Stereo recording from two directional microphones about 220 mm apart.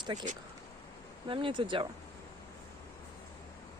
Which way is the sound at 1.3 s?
25° right (ahead or behind).